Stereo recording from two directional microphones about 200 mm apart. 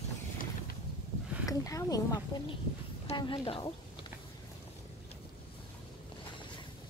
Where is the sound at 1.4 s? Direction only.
15° left (ahead or behind).